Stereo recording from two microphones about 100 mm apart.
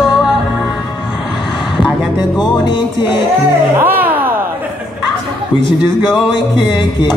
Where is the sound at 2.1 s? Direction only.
50° left (ahead or behind).